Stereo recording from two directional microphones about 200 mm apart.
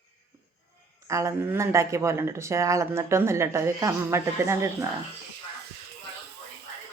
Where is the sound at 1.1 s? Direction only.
15° right (ahead or behind).